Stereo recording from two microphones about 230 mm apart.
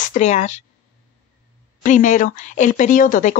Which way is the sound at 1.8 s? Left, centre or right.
Left.